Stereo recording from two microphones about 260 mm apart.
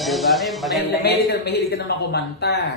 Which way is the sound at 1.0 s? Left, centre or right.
Left.